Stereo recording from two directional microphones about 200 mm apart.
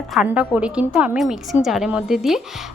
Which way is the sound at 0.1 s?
5° right (ahead or behind).